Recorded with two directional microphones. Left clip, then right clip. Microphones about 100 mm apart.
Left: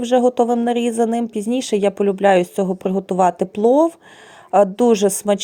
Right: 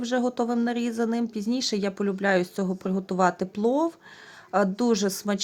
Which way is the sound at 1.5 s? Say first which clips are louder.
Left 11 dB; 45° left (ahead or behind).